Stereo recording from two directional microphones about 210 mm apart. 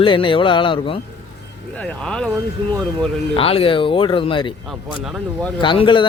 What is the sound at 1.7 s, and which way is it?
Speech, 5° left (ahead or behind).